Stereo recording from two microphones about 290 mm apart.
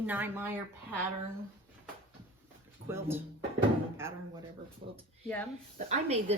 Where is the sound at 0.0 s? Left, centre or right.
Centre.